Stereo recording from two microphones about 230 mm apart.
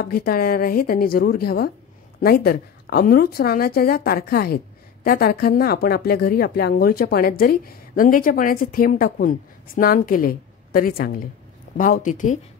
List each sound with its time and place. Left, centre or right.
0.0 s speech: left